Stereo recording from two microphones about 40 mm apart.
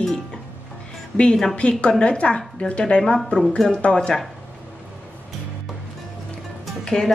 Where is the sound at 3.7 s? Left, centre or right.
Left.